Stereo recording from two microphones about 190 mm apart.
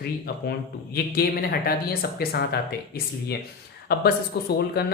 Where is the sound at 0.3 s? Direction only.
55° left (ahead or behind).